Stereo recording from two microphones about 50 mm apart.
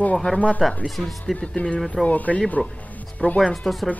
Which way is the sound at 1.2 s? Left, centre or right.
Centre.